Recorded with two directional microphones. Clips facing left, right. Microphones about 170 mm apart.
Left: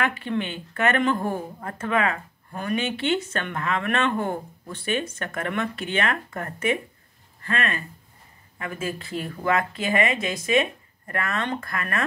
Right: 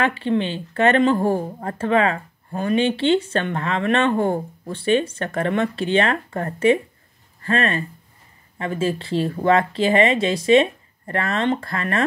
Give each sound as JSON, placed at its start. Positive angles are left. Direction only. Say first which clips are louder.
{"t": 0.0, "sound": "speech", "louder": "right 6 dB", "side_deg": -25}